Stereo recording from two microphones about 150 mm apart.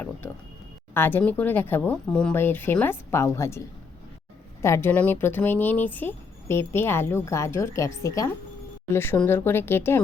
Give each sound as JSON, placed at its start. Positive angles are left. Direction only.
{"t": 0.9, "sound": "speech", "side_deg": 15}
{"t": 4.6, "sound": "speech", "side_deg": 15}